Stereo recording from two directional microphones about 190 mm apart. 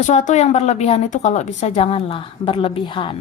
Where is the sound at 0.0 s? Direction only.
40° left (ahead or behind).